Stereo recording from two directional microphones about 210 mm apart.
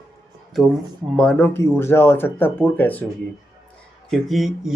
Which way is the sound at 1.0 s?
5° left (ahead or behind).